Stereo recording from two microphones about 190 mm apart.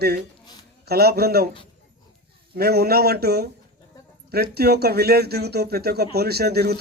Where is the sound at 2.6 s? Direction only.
55° right (ahead or behind).